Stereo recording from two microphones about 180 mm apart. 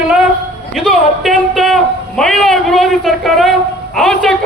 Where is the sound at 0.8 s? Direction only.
Centre (ahead or behind).